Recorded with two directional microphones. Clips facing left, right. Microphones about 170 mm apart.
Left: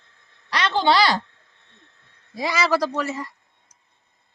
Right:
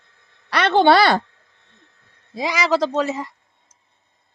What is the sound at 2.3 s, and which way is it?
Speech, 15° right (ahead or behind).